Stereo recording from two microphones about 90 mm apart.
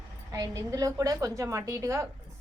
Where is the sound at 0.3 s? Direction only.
35° right (ahead or behind).